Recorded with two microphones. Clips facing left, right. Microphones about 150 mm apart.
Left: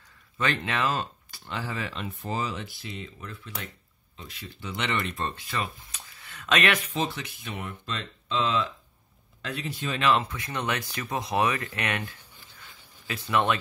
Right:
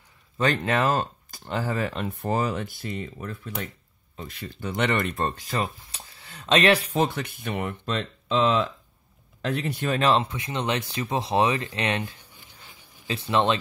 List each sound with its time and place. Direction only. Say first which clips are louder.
0.4 s speech: right 5 dB; 40° right (ahead or behind)
7.0 s speech: right 6 dB; 55° right (ahead or behind)
9.9 s speech: right 2 dB; 30° right (ahead or behind)
12.0 s a sound: right 4 dB; 15° right (ahead or behind)
13.1 s speech: right 3 dB; 25° right (ahead or behind)